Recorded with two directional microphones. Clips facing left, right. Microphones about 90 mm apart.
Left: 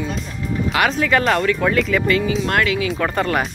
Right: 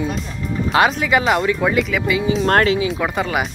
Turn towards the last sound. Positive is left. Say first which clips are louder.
# left 1 dB
turn(degrees=-5)  # may be behind; listen again after turning